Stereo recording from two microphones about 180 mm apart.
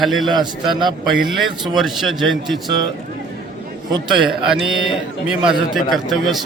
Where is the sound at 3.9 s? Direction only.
25° right (ahead or behind).